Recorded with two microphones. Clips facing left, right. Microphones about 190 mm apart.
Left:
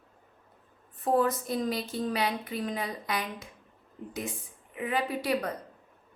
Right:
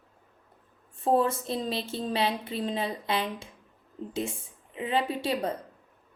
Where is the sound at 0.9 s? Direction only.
25° right (ahead or behind).